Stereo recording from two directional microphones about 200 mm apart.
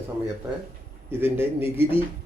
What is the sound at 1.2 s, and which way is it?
Speech, 10° right (ahead or behind).